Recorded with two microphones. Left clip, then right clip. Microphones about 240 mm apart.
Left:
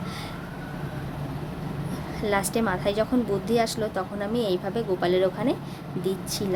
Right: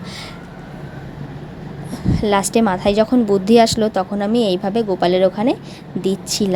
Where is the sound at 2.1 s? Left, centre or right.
Right.